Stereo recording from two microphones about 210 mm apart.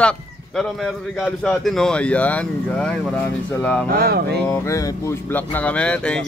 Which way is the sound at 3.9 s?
45° right (ahead or behind).